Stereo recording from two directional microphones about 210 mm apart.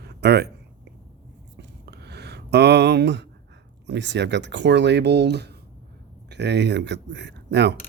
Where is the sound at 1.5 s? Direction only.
55° right (ahead or behind).